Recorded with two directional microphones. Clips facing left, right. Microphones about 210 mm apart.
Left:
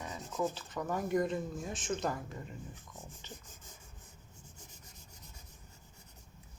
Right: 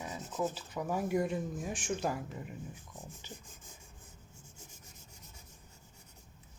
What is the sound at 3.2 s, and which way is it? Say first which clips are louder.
Rub: left 1 dB; 10° right (ahead or behind).